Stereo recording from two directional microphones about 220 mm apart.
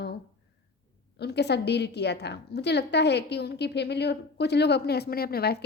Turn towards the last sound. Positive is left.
turn(degrees=45)  # may be behind; listen again after turning